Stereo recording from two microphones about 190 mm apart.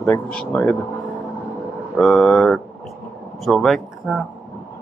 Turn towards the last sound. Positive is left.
turn(degrees=0)  # may be behind; listen again after turning